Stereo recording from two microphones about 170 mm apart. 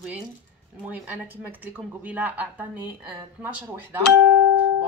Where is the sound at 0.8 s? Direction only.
10° right (ahead or behind).